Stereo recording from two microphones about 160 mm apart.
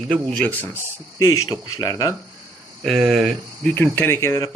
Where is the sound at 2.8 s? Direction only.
Centre (ahead or behind).